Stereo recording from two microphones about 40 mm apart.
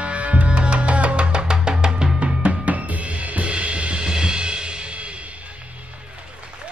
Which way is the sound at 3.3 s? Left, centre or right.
Right.